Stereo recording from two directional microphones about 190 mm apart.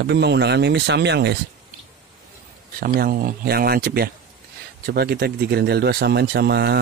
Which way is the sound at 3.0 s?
50° right (ahead or behind).